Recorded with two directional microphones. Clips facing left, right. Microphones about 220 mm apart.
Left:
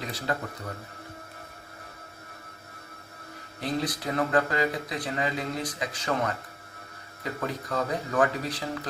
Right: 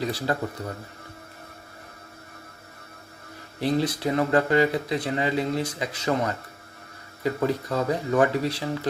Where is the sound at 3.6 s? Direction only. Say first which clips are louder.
Right 6 dB; 30° right (ahead or behind).